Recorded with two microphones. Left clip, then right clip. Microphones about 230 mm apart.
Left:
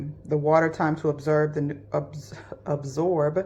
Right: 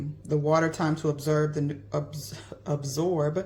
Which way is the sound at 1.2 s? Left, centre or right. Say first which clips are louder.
Left 4 dB; right.